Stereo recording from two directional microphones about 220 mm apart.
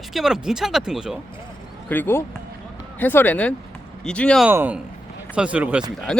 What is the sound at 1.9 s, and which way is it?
Speech, 10° left (ahead or behind).